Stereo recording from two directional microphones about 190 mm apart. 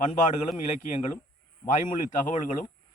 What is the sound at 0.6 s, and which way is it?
A man's voice, 40° left (ahead or behind).